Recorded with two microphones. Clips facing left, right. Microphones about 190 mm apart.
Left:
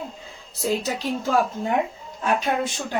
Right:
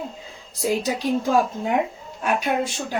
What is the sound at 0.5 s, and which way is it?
Speech, 10° right (ahead or behind).